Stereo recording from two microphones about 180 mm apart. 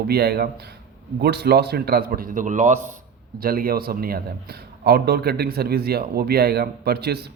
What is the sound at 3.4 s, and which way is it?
A man's voice, 55° right (ahead or behind).